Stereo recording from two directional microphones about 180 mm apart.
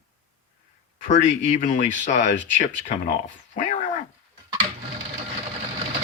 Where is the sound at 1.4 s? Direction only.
45° left (ahead or behind).